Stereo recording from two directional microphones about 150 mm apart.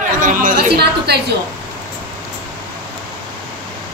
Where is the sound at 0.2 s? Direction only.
60° right (ahead or behind); by 1.2 s 90° right.